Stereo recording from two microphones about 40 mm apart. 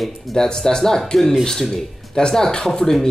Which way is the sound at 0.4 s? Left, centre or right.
Centre.